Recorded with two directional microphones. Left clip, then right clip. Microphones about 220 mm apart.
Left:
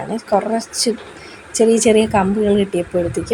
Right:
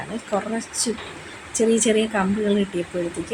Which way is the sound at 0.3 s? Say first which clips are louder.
Left 9 dB; 15° left (ahead or behind).